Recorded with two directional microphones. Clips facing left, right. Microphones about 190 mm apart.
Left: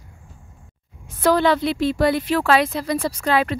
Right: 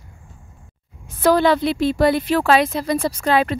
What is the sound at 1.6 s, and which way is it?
Speech, 40° right (ahead or behind).